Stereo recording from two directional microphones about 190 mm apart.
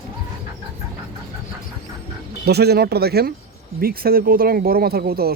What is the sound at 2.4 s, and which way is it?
Speech, 55° right (ahead or behind).